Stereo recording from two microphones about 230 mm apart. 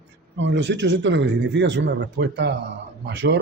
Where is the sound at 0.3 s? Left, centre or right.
Right.